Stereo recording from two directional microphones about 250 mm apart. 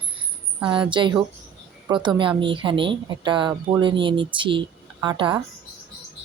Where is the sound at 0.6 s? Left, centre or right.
Centre.